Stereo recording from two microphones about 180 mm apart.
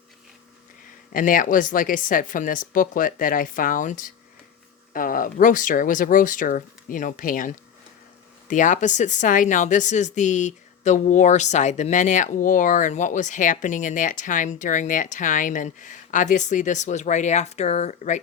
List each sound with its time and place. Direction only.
1.1 s speech: 50° left (ahead or behind)